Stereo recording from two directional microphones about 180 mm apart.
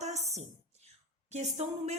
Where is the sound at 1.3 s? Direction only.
40° right (ahead or behind).